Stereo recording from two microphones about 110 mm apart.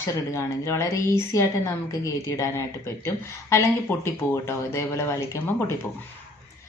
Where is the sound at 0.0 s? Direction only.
25° left (ahead or behind).